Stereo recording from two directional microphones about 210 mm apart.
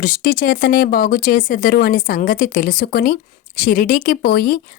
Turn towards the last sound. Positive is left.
turn(degrees=45)  # may be behind; listen again after turning